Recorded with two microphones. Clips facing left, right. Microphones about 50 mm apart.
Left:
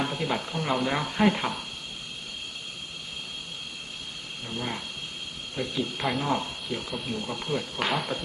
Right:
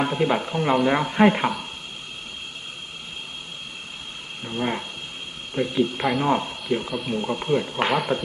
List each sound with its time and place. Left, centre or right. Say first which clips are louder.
0.0 s speech: right 7 dB; right
4.4 s speech: right 7 dB; right
7.9 s speech: right 4 dB; centre